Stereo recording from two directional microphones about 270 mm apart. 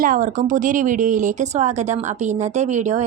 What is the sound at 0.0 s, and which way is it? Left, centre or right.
A woman's voice, right.